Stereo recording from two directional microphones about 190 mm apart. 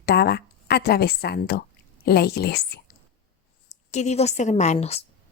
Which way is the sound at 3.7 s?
35° left (ahead or behind).